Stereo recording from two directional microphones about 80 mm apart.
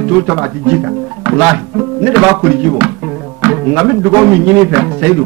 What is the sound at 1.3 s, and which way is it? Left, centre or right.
Speech, centre.